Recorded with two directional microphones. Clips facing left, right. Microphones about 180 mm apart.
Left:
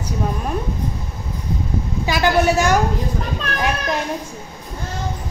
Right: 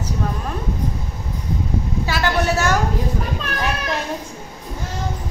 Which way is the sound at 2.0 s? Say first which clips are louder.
Left 5 dB; 15° left (ahead or behind).